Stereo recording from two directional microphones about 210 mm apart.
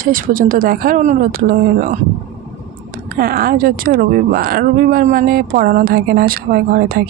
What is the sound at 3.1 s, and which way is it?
Speech, 45° right (ahead or behind).